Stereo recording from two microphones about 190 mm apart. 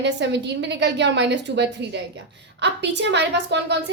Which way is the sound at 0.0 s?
65° right (ahead or behind).